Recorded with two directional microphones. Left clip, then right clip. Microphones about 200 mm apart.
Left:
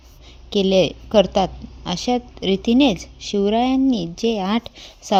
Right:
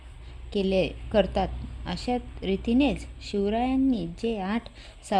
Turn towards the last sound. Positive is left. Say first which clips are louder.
# left 8 dB
turn(degrees=25)  # may be behind; listen again after turning